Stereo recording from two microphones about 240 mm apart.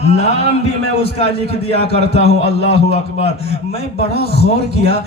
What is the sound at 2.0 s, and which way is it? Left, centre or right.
A man's voice, left.